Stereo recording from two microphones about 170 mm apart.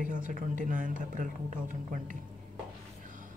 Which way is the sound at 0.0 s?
50° right (ahead or behind).